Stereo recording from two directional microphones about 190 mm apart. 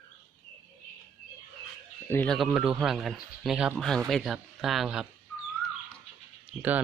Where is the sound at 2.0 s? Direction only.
10° left (ahead or behind).